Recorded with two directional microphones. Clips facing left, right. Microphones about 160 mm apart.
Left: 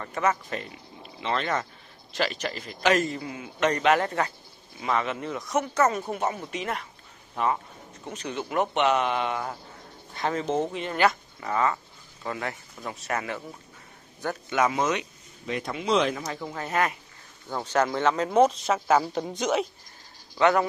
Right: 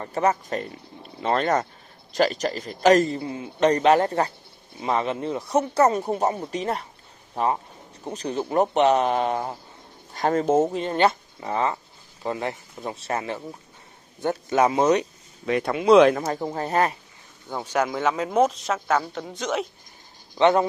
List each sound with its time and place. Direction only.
0.0 s a man's voice: 35° right (ahead or behind)
15.4 s speech: 60° right (ahead or behind); by 16.9 s 35° right (ahead or behind)
17.5 s speech: 10° right (ahead or behind)
19.1 s speech: 15° left (ahead or behind)
20.3 s speech: 25° right (ahead or behind)